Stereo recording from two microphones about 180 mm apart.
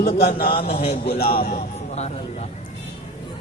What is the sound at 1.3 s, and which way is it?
Speech, 55° left (ahead or behind).